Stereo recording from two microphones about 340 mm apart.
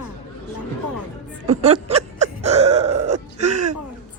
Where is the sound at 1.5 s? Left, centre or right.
Centre.